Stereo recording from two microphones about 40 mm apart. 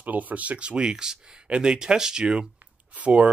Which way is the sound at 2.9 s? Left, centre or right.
Right.